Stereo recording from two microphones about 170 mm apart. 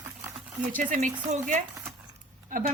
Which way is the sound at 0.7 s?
50° right (ahead or behind).